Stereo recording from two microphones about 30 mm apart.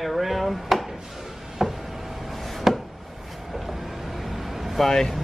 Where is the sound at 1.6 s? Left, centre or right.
Centre.